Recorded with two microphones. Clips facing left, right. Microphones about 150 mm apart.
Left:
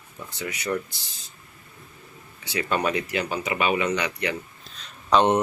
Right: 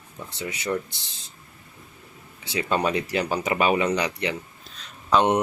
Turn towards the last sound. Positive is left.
turn(degrees=-10)  # may be behind; listen again after turning